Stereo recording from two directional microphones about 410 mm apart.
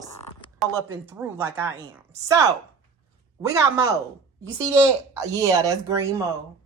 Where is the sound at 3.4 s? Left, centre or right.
Centre.